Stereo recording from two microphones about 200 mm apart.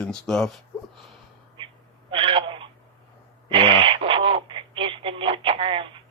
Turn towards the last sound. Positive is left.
turn(degrees=-25)  # may be behind; listen again after turning